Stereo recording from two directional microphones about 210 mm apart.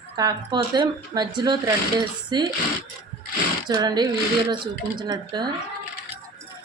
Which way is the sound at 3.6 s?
20° right (ahead or behind).